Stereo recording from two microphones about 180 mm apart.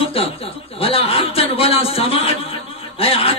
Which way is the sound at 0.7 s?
30° left (ahead or behind).